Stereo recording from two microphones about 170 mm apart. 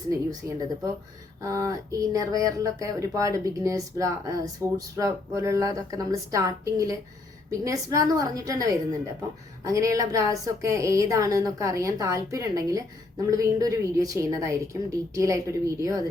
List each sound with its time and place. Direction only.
0.4 s a woman's voice: 15° right (ahead or behind)